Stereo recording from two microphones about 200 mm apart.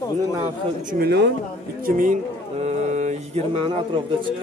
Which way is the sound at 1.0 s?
55° right (ahead or behind).